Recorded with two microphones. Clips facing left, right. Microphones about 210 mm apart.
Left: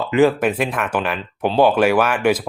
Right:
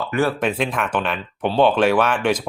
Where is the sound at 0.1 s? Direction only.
15° left (ahead or behind).